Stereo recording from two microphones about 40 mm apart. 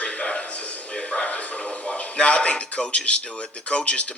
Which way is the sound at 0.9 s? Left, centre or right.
Left.